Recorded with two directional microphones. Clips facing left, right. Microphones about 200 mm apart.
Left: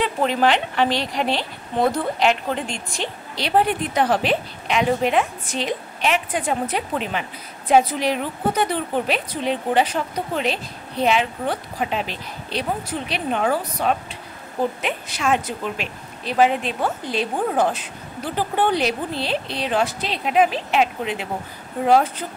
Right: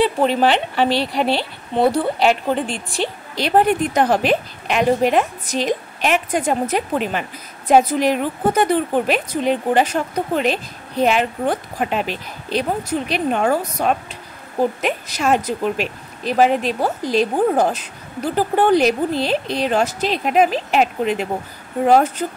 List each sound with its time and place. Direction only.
0.0 s speech: 30° right (ahead or behind)
3.3 s a woman's voice: 45° right (ahead or behind)